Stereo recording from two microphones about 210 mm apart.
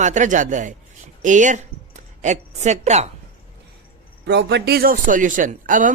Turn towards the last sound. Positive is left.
turn(degrees=-40)  # may be behind; listen again after turning